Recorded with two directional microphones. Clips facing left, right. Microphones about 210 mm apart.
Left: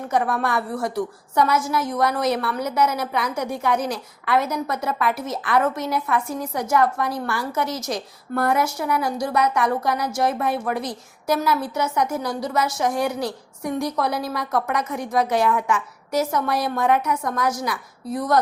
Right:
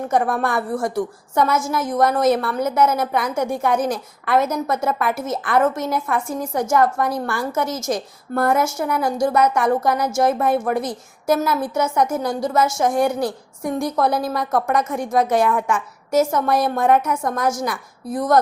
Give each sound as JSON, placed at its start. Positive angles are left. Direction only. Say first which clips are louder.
{"t": 0.1, "sound": "a woman's voice", "louder": "right 1 dB", "side_deg": -50}